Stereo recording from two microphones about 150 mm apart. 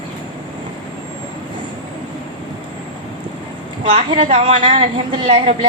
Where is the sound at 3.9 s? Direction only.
45° right (ahead or behind).